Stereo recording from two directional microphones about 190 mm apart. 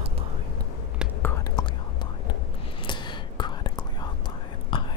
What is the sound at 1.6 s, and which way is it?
Whispering, 20° left (ahead or behind).